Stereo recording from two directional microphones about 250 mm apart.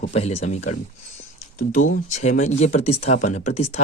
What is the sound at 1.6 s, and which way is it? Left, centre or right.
Speech, left.